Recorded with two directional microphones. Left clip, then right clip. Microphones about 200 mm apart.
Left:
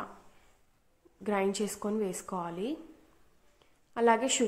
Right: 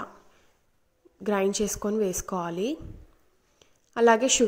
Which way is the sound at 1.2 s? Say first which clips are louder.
Right 5 dB; 20° right (ahead or behind).